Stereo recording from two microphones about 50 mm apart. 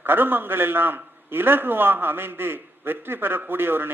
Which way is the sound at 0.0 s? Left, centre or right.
Right.